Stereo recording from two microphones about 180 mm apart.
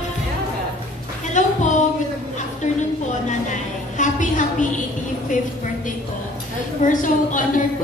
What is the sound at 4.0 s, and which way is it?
Speech, 45° left (ahead or behind).